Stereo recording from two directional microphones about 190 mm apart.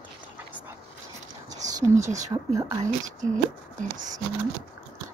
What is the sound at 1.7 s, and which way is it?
Speech, 15° right (ahead or behind).